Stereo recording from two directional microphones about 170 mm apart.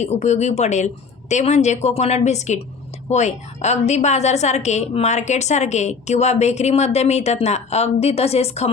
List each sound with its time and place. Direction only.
0.0 s a woman's voice: 40° left (ahead or behind)